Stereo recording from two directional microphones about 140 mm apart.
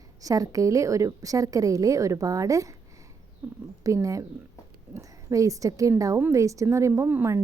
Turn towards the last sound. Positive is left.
turn(degrees=-15)  # may be behind; listen again after turning